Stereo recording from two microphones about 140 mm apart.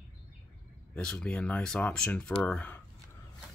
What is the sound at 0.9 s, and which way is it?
Speech, 5° left (ahead or behind).